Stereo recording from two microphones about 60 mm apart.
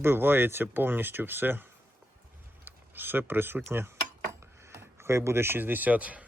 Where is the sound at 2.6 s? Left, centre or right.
Right.